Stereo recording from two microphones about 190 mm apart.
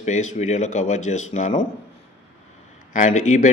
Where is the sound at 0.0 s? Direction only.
40° left (ahead or behind).